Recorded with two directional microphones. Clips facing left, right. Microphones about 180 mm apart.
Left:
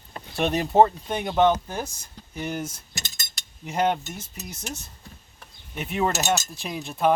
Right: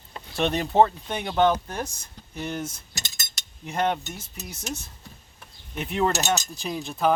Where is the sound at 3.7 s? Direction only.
5° left (ahead or behind).